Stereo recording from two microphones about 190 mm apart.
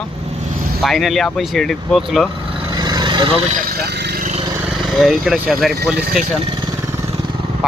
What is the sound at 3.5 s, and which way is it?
Speech, 50° right (ahead or behind).